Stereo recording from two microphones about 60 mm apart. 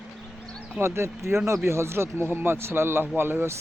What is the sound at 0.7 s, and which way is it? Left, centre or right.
Speech, right.